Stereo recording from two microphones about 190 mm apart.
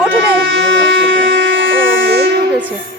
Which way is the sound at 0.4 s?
85° right.